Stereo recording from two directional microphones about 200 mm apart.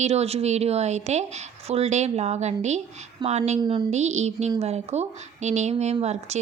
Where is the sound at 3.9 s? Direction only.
35° right (ahead or behind).